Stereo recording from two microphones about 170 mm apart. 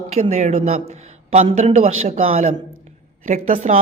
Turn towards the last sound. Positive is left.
turn(degrees=-50)  # may be behind; listen again after turning